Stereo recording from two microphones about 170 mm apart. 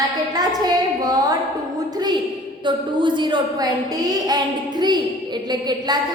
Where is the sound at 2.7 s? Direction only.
25° right (ahead or behind).